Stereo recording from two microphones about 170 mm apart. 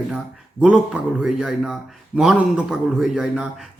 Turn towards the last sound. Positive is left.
turn(degrees=-5)  # may be behind; listen again after turning